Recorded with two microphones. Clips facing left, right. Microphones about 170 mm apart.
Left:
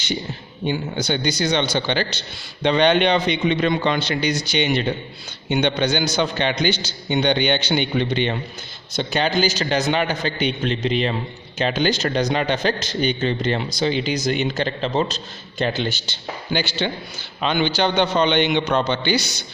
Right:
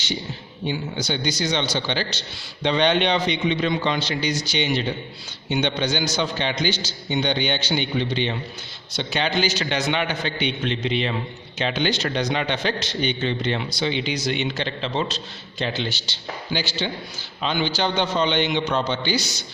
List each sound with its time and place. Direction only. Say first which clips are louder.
0.6 s a man's voice: left 3 dB; 55° left (ahead or behind)
9.0 s a man's voice: left 3 dB; 45° left (ahead or behind); by 19.5 s 65° left (ahead or behind)